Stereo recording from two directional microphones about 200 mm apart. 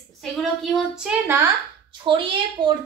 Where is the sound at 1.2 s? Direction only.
10° right (ahead or behind).